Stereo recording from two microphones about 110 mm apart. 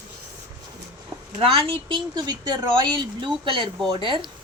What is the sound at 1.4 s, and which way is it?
Speech, 55° right (ahead or behind).